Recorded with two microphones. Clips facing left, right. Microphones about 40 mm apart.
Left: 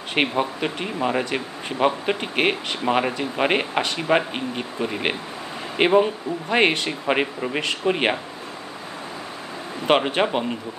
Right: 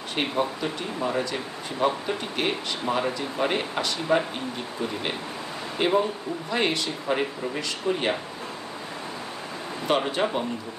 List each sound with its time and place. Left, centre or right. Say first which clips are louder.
0.1 s speech: left 4 dB; left
9.8 s speech: left 5 dB; left